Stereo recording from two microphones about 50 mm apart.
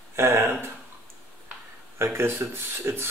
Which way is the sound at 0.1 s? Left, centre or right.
Right.